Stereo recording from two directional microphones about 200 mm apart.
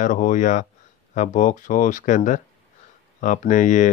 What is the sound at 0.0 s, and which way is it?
Speech, 40° left (ahead or behind).